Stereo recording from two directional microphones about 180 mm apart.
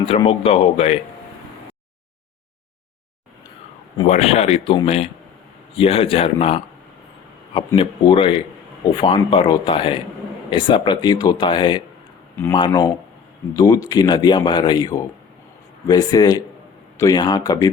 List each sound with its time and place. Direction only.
0.2 s speech: 30° left (ahead or behind)
3.9 s speech: 35° left (ahead or behind)
7.8 s speech: 30° left (ahead or behind)